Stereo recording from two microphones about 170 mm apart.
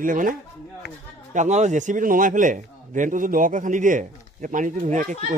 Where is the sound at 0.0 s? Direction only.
50° right (ahead or behind).